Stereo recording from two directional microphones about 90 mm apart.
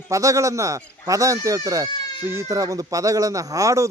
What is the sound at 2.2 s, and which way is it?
Speech, 25° right (ahead or behind).